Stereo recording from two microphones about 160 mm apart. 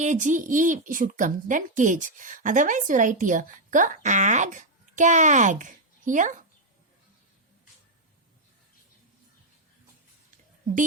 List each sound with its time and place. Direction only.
0.0 s a woman's voice: 50° right (ahead or behind)